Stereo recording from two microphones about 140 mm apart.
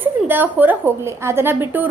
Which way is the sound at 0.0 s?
15° right (ahead or behind).